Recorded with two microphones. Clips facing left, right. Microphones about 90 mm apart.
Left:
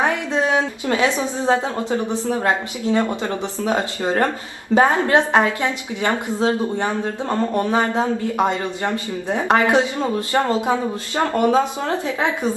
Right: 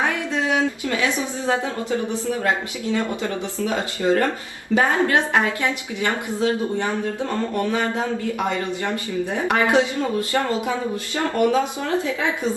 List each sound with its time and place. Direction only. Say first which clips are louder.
0.0 s speech: left 3 dB; 20° left (ahead or behind)